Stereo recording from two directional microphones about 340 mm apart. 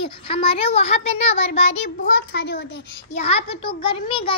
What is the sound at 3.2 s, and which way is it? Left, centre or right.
Child singing, centre.